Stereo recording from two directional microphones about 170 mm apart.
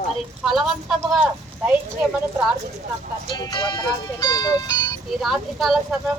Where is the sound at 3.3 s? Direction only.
25° left (ahead or behind).